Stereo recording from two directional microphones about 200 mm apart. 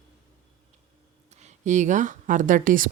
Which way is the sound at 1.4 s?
35° right (ahead or behind).